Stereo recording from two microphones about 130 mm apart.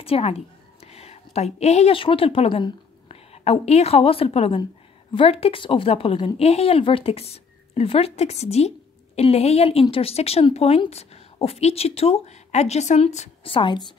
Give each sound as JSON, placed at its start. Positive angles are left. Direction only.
{"t": 0.0, "sound": "a woman's voice", "side_deg": 50}
{"t": 13.5, "sound": "a woman's voice", "side_deg": 40}